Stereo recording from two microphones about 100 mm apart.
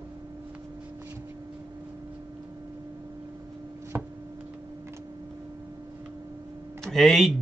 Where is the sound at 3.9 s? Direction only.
25° right (ahead or behind).